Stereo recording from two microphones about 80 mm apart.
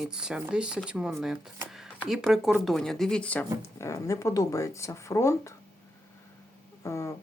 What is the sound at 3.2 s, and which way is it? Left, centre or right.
Speech, centre.